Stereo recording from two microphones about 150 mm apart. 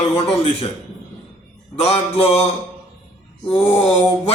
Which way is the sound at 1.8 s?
45° left (ahead or behind).